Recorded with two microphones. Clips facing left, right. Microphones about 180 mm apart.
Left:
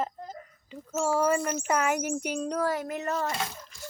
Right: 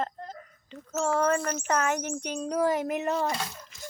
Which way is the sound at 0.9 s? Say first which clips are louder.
Even; 5° left (ahead or behind).